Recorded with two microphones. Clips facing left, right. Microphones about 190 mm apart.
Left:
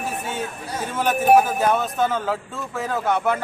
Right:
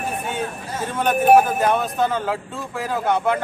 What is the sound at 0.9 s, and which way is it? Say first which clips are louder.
Speech: right 2 dB; 5° left (ahead or behind).